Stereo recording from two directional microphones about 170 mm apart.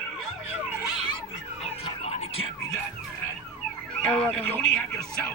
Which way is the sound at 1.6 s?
40° left (ahead or behind).